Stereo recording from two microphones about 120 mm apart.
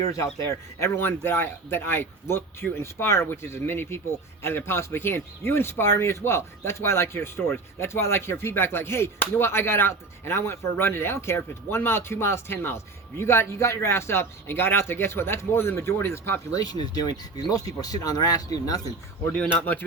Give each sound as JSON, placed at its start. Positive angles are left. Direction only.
{"t": 0.0, "sound": "speech", "side_deg": 25}
{"t": 16.6, "sound": "speech", "side_deg": 35}
{"t": 19.2, "sound": "speech", "side_deg": 10}